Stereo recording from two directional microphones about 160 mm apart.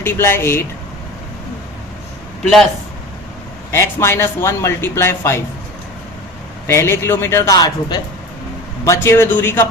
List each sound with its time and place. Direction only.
0.0 s speech: 15° left (ahead or behind)
2.4 s speech: centre (ahead or behind)
3.7 s speech: 15° left (ahead or behind)
6.7 s speech: 15° left (ahead or behind)